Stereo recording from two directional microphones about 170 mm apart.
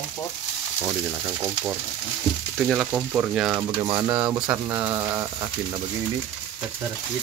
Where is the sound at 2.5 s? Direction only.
Centre (ahead or behind).